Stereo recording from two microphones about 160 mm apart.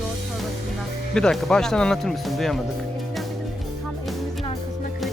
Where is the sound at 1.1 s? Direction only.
5° left (ahead or behind).